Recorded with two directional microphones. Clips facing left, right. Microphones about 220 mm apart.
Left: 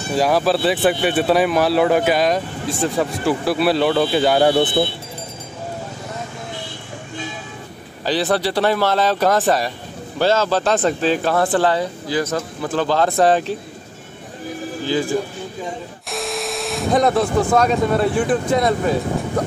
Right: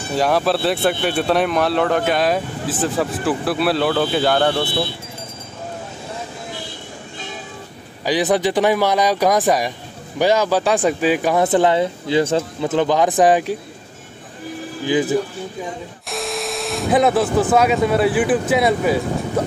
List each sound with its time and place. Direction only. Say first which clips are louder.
0.1 s speech: left 1 dB; centre (ahead or behind)
8.0 s speech: right 2 dB; 15° right (ahead or behind)
14.9 s speech: right 3 dB; 20° right (ahead or behind)
16.1 s speech: even; centre (ahead or behind)